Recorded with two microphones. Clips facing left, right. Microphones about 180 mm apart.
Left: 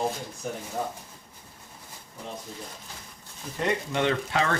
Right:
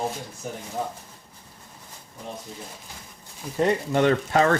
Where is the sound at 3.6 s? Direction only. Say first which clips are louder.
Right 6 dB; 40° right (ahead or behind).